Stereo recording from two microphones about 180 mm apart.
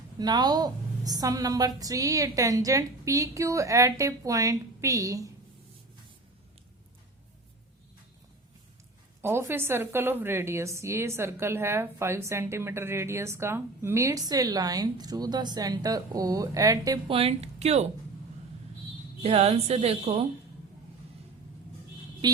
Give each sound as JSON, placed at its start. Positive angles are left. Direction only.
{"t": 0.2, "sound": "a woman's voice", "side_deg": -20}
{"t": 9.2, "sound": "a woman's voice", "side_deg": -15}
{"t": 17.1, "sound": "speech", "side_deg": -30}
{"t": 19.2, "sound": "speech", "side_deg": -35}